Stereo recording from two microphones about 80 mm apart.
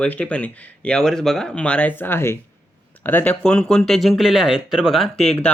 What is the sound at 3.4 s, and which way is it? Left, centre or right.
Speech, centre.